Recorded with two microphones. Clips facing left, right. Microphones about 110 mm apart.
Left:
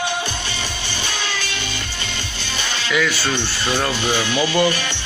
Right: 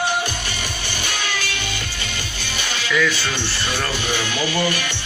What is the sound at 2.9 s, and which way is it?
Speech, 10° left (ahead or behind).